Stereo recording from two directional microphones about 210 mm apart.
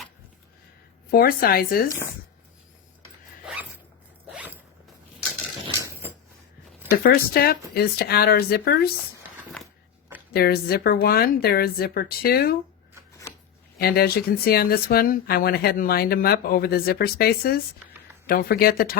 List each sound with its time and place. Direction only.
1.1 s speech: 45° left (ahead or behind)
3.4 s zipper: 5° right (ahead or behind)
7.0 s speech: 45° left (ahead or behind)
10.3 s speech: 45° left (ahead or behind)
13.7 s speech: 45° left (ahead or behind)